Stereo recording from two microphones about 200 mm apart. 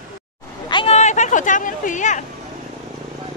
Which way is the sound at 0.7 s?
30° left (ahead or behind).